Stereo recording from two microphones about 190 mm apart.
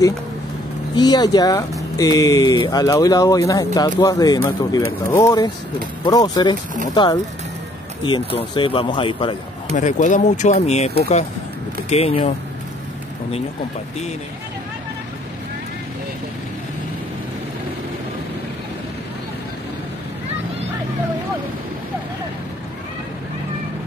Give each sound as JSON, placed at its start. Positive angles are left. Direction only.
{"t": 0.9, "sound": "speech", "side_deg": 20}
{"t": 9.8, "sound": "speech", "side_deg": 40}